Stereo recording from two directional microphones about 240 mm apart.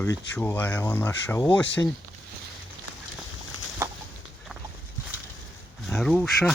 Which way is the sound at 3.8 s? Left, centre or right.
Centre.